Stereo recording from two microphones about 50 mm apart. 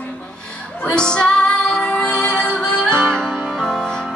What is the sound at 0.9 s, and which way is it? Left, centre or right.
Music, centre.